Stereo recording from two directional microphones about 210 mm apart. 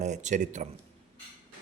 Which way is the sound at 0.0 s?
35° right (ahead or behind).